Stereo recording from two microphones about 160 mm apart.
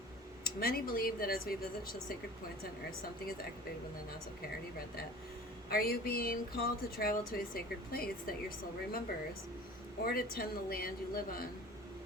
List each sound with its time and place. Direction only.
0.4 s speech: 70° left (ahead or behind)
5.6 s speech: 70° left (ahead or behind)
10.1 s speech: 70° left (ahead or behind)